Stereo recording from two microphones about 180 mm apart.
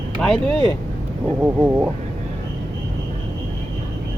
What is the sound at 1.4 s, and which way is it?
Speech, 10° right (ahead or behind).